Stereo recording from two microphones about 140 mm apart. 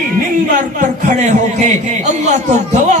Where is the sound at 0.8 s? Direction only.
55° right (ahead or behind).